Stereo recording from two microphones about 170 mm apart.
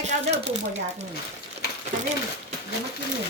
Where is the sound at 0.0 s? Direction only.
40° right (ahead or behind).